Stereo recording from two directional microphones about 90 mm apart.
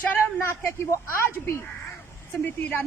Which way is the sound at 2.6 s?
20° left (ahead or behind).